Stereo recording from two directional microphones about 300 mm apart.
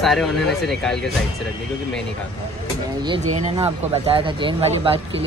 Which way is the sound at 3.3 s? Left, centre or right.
Right.